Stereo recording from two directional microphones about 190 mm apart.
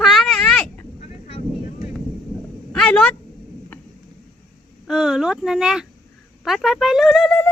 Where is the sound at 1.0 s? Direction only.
30° left (ahead or behind).